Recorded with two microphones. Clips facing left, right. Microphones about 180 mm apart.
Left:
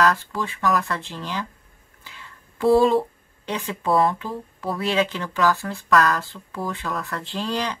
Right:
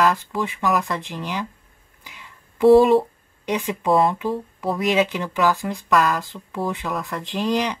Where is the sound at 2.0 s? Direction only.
15° right (ahead or behind).